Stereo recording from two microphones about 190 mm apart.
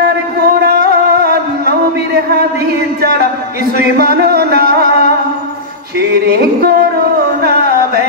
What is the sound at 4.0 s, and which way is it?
Music, 55° right (ahead or behind).